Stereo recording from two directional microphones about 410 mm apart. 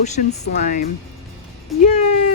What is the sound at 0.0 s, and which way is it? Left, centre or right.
Speech, centre.